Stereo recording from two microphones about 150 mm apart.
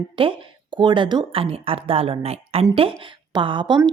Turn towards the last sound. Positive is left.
turn(degrees=-30)  # may be behind; listen again after turning